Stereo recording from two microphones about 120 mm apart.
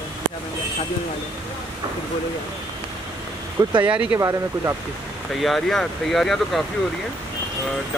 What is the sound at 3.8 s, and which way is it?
Speech, 10° right (ahead or behind).